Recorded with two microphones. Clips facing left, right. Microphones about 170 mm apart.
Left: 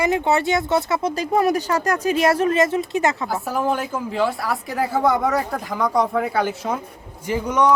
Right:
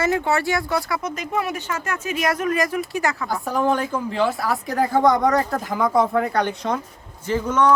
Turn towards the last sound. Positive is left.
turn(degrees=15)  # may be behind; listen again after turning